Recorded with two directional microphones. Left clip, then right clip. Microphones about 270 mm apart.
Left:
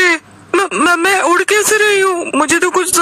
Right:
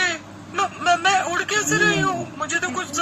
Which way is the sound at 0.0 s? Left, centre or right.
Left.